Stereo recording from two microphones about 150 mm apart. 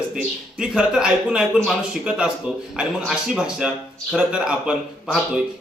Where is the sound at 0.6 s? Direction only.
5° right (ahead or behind).